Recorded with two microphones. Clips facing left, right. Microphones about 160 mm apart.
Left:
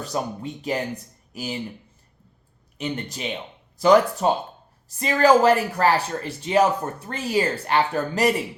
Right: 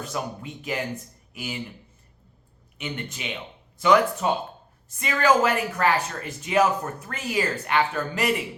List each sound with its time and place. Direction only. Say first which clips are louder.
0.0 s speech: left 4 dB; 35° left (ahead or behind)
2.7 s speech: left 4 dB; 35° left (ahead or behind)